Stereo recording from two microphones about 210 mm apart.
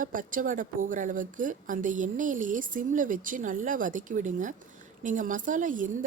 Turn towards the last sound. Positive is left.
turn(degrees=-40)  # may be behind; listen again after turning